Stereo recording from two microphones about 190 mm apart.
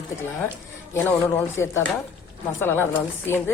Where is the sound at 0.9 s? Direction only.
10° left (ahead or behind).